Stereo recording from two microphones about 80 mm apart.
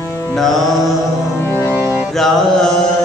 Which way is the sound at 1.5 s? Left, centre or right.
Left.